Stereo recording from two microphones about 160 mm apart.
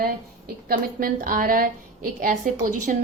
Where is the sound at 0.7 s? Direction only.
65° right (ahead or behind).